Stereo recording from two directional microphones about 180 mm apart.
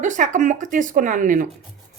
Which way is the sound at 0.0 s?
45° right (ahead or behind).